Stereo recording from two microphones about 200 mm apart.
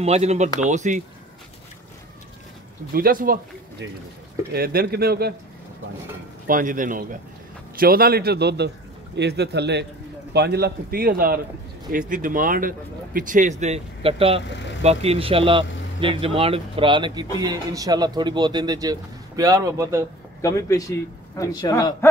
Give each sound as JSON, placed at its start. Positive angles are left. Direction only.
{"t": 0.0, "sound": "speech", "side_deg": -30}
{"t": 2.9, "sound": "a man's voice", "side_deg": -45}
{"t": 4.6, "sound": "a man's voice", "side_deg": -50}
{"t": 6.4, "sound": "a man's voice", "side_deg": -45}
{"t": 20.4, "sound": "a man's voice", "side_deg": 15}